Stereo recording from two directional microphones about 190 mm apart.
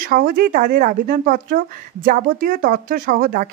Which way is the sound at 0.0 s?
50° right (ahead or behind).